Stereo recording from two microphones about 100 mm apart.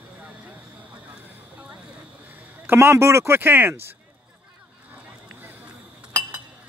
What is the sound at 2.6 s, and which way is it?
Speech, 25° right (ahead or behind).